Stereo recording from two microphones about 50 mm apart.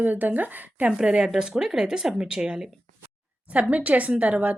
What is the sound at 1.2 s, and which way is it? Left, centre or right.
Speech, centre.